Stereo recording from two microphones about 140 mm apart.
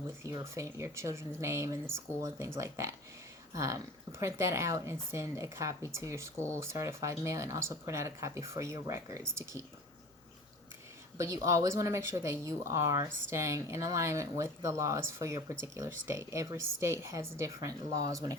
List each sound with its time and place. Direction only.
0.2 s speech: 25° right (ahead or behind)
11.2 s speech: 20° right (ahead or behind)